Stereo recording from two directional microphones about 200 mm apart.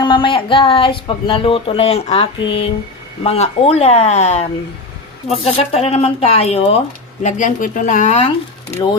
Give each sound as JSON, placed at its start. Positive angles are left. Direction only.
{"t": 0.0, "sound": "speech", "side_deg": 25}